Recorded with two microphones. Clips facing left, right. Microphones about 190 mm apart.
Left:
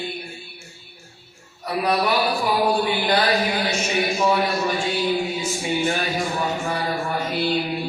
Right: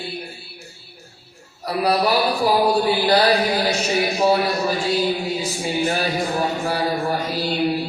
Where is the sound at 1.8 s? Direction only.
35° right (ahead or behind).